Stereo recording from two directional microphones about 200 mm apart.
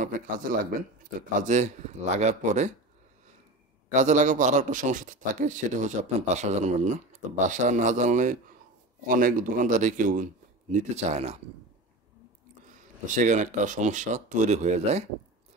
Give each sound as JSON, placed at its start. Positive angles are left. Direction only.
{"t": 0.0, "sound": "a man's voice", "side_deg": -40}
{"t": 3.9, "sound": "a man's voice", "side_deg": -35}
{"t": 13.0, "sound": "a man's voice", "side_deg": -40}